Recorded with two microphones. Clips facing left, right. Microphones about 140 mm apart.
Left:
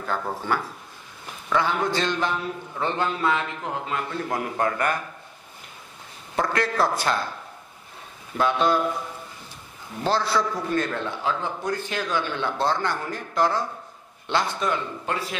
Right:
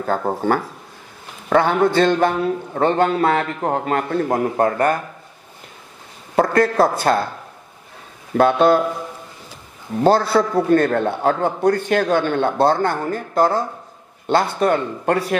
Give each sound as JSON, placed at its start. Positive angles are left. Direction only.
{"t": 0.0, "sound": "a man's voice", "side_deg": -45}
{"t": 6.3, "sound": "a man's voice", "side_deg": -50}
{"t": 8.4, "sound": "a man's voice", "side_deg": -55}
{"t": 10.0, "sound": "a man's voice", "side_deg": -55}